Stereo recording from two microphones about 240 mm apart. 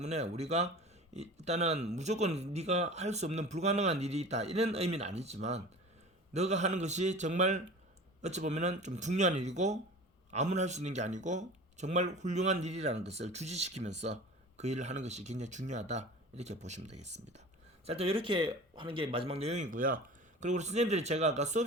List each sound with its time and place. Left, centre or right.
0.0 s speech: right